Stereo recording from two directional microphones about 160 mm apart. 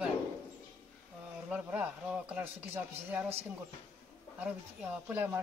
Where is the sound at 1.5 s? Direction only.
10° right (ahead or behind).